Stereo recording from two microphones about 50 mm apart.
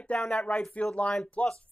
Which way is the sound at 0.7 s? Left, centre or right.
Left.